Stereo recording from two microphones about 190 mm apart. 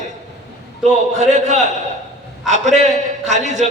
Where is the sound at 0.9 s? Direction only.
40° right (ahead or behind).